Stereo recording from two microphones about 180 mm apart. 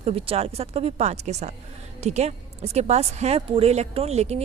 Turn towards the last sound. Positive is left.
turn(degrees=-35)  # may be behind; listen again after turning